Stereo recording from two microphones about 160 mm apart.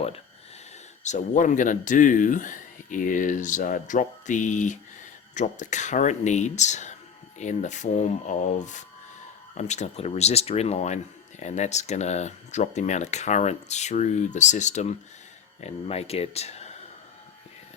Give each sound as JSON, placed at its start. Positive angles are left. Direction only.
{"t": 1.0, "sound": "speech", "side_deg": 50}